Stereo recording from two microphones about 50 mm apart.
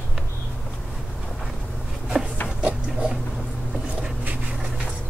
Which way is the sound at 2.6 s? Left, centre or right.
Centre.